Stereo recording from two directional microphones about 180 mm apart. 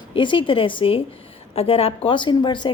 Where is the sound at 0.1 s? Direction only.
25° left (ahead or behind).